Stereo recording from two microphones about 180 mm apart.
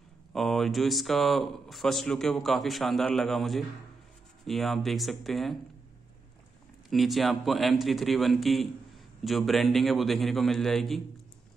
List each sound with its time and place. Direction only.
0.3 s a man's voice: centre (ahead or behind)
6.9 s a man's voice: centre (ahead or behind)